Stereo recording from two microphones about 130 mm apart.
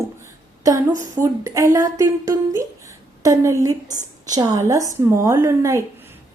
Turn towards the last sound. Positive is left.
turn(degrees=-20)  # may be behind; listen again after turning